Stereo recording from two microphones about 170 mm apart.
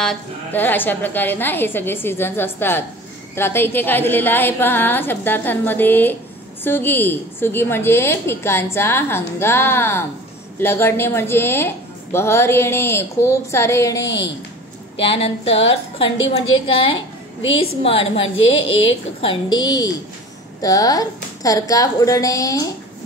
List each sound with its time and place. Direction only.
0.0 s a woman's voice: 10° left (ahead or behind)
15.0 s a woman's voice: 35° left (ahead or behind)
18.2 s a woman's voice: 90° left
19.2 s a woman's voice: 25° left (ahead or behind)